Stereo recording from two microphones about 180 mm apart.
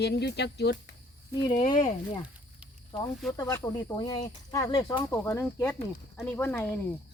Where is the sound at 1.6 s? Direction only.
25° left (ahead or behind).